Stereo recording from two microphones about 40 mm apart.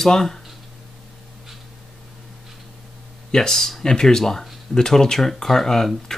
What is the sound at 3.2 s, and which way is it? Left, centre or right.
Speech, centre.